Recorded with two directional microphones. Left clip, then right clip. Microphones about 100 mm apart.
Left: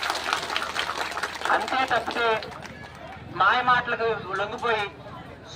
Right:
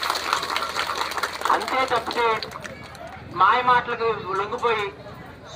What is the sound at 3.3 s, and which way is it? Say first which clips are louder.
A man's voice: right 3 dB; 20° left (ahead or behind).